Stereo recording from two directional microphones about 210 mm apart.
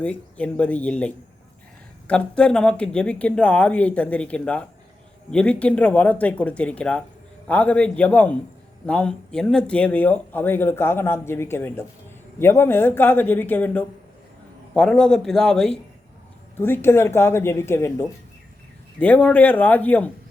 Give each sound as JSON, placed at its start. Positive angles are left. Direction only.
{"t": 0.0, "sound": "speech", "side_deg": 5}